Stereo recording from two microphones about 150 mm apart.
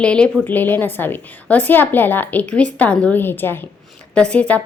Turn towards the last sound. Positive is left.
turn(degrees=10)  # may be behind; listen again after turning